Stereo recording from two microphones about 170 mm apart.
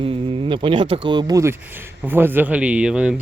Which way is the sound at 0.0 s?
30° right (ahead or behind).